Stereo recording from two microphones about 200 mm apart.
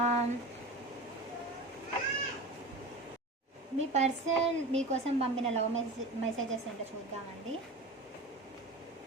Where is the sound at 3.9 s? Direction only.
35° right (ahead or behind).